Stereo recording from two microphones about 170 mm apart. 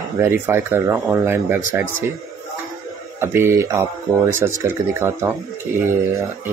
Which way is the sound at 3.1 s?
15° right (ahead or behind).